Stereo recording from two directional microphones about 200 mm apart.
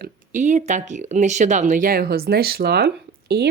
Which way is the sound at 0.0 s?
35° right (ahead or behind).